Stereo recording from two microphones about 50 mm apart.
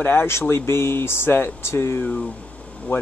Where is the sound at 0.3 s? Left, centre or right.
Left.